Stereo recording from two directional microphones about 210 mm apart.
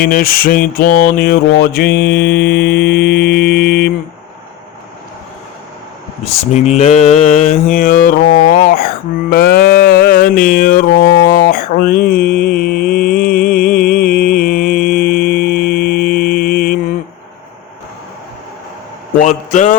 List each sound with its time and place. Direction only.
0.0 s mantra: 45° left (ahead or behind)
6.2 s mantra: 30° left (ahead or behind)
9.3 s music: 50° left (ahead or behind)
11.3 s mantra: 40° left (ahead or behind)
19.2 s a sound: 35° left (ahead or behind)